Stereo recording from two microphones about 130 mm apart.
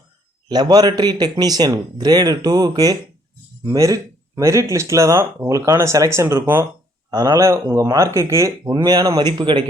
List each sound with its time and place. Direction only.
0.4 s a man's voice: 35° right (ahead or behind); by 6.7 s 15° right (ahead or behind)
7.1 s speech: 25° right (ahead or behind)